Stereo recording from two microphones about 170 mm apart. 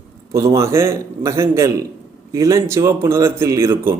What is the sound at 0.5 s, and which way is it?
A man's voice, 15° right (ahead or behind).